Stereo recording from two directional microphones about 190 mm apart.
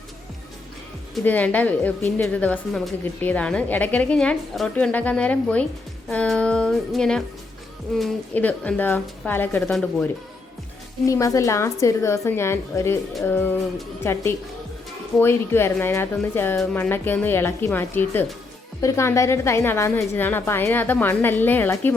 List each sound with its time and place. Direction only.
1.1 s a woman's voice: 10° left (ahead or behind)
6.1 s music: 5° left (ahead or behind)
7.9 s a woman's voice: 5° left (ahead or behind)